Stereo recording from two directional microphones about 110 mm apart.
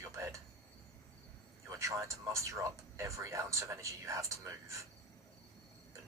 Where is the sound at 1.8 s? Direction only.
25° right (ahead or behind).